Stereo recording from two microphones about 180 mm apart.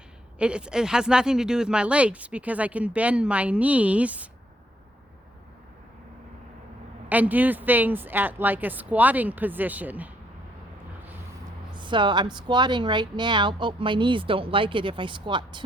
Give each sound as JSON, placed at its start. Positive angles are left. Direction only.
{"t": 0.3, "sound": "speech", "side_deg": -5}
{"t": 7.1, "sound": "speech", "side_deg": -10}
{"t": 11.7, "sound": "speech", "side_deg": -25}